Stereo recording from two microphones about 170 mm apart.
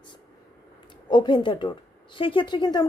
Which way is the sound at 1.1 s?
25° left (ahead or behind).